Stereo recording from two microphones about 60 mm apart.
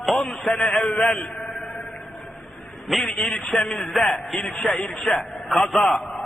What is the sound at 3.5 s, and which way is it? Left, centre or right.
A man's voice, centre.